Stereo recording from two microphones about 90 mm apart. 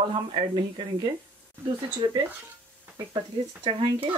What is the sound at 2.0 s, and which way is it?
Speech, 55° right (ahead or behind).